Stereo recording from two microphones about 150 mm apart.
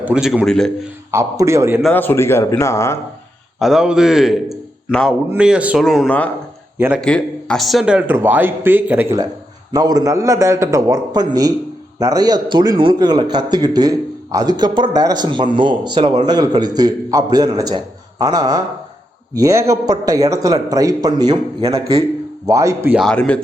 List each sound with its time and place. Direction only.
0.0 s a man's voice: 5° right (ahead or behind)
1.1 s a man's voice: 20° right (ahead or behind)
1.9 s speech: 15° left (ahead or behind)
3.6 s a man's voice: 5° right (ahead or behind)
5.3 s a man's voice: 10° right (ahead or behind)
6.7 s speech: 15° right (ahead or behind)
7.0 s speech: 5° left (ahead or behind); by 9.1 s 15° right (ahead or behind)
9.7 s a man's voice: 25° right (ahead or behind)
23.0 s speech: 5° left (ahead or behind)